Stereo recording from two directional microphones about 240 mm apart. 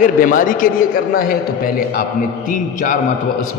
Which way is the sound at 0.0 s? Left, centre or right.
Left.